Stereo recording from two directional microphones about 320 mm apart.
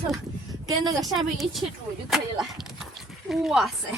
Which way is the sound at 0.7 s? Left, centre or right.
Centre.